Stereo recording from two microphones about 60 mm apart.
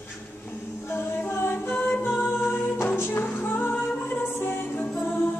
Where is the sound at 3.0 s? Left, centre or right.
Left.